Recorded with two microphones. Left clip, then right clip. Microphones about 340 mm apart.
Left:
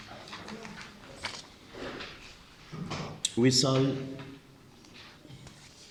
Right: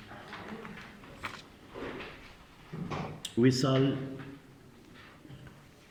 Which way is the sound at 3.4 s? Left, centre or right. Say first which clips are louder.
Left 2 dB; centre.